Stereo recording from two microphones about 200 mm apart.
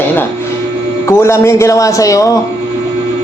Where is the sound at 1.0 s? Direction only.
10° left (ahead or behind).